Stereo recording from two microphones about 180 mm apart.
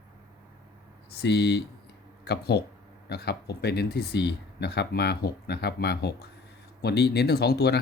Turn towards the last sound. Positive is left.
turn(degrees=65)  # may be behind; listen again after turning